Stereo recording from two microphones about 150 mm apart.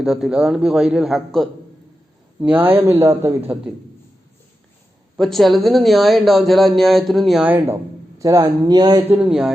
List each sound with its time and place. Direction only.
0.0 s speech: centre (ahead or behind)
2.4 s speech: 10° right (ahead or behind)
5.1 s speech: centre (ahead or behind)
8.2 s speech: 25° right (ahead or behind)
9.0 s speech: 10° right (ahead or behind)